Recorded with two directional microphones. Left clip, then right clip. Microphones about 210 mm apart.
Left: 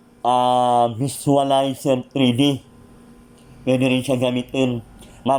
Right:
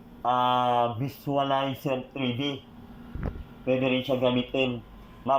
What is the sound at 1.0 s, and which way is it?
Speech, 35° left (ahead or behind).